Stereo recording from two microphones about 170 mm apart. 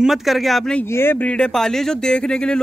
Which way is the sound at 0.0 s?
Centre (ahead or behind).